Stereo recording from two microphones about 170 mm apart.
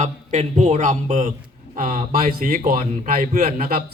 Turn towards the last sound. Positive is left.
turn(degrees=-60)  # may be behind; listen again after turning